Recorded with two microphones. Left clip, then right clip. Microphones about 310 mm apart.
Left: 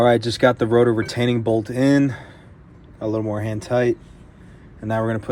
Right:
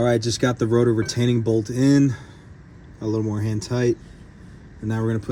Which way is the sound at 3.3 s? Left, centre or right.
Centre.